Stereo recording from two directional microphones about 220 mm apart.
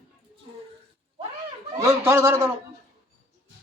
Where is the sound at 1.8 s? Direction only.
15° right (ahead or behind).